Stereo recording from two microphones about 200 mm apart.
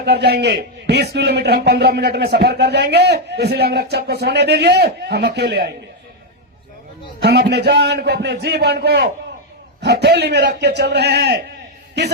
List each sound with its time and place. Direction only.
0.0 s speech: 55° right (ahead or behind)
7.2 s speech: 55° right (ahead or behind)